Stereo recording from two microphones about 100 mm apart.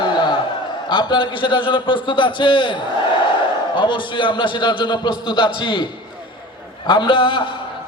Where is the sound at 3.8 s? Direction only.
55° left (ahead or behind).